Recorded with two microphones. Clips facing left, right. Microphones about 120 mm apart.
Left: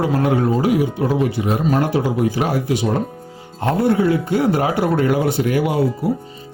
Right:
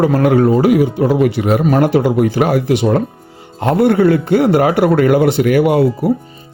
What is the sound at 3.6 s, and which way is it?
Speech, 80° right.